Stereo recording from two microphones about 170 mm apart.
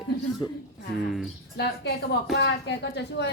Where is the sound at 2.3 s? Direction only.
85° left.